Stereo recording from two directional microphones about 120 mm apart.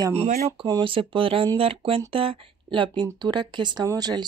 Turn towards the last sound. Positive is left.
turn(degrees=-35)  # may be behind; listen again after turning